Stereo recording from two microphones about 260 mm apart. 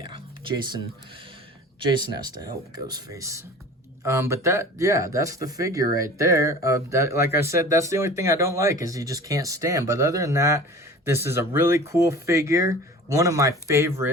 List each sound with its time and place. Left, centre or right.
0.0 s music: centre
2.0 s speech: centre